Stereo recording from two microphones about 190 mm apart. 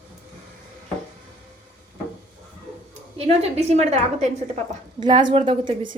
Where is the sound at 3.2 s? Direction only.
35° right (ahead or behind).